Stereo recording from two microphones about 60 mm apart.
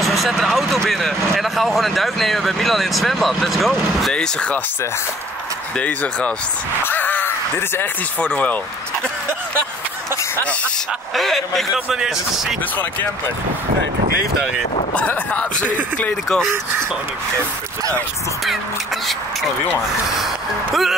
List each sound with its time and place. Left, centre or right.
0.0 s a sound: centre
0.8 s speech: centre
4.1 s speech: centre
5.8 s speech: left
6.8 s caw: left
8.2 s speech: left
11.1 s speech: centre
11.7 s speech: centre
15.0 s speech: left